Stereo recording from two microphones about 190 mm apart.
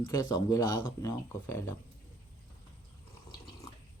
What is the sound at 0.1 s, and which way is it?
Speech, 20° left (ahead or behind).